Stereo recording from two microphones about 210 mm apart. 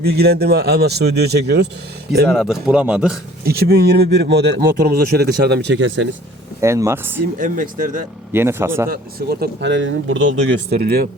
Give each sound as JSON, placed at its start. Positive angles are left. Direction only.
{"t": 0.0, "sound": "speech", "side_deg": -50}
{"t": 2.3, "sound": "speech", "side_deg": 0}
{"t": 3.4, "sound": "speech", "side_deg": -50}
{"t": 6.6, "sound": "speech", "side_deg": -15}
{"t": 7.3, "sound": "speech", "side_deg": -40}
{"t": 8.3, "sound": "speech", "side_deg": -10}
{"t": 8.9, "sound": "speech", "side_deg": -45}